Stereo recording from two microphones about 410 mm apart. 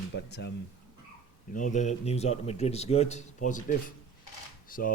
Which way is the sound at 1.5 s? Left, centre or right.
Centre.